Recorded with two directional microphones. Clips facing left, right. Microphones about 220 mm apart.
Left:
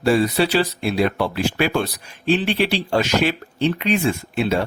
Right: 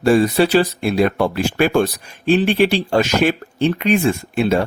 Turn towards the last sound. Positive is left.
turn(degrees=-50)  # may be behind; listen again after turning